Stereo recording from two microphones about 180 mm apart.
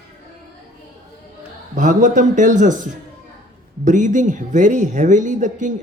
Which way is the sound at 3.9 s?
45° right (ahead or behind).